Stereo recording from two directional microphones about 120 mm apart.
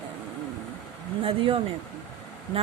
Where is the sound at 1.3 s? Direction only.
50° right (ahead or behind).